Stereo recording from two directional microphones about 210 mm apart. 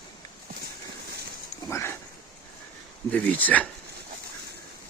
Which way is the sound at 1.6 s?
15° left (ahead or behind).